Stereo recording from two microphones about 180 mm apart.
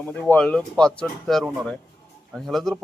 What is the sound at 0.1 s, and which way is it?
Speech, 5° left (ahead or behind).